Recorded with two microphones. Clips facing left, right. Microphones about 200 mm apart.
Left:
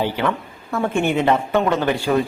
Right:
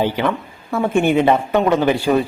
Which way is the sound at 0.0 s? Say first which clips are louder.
Right 3 dB; 15° right (ahead or behind).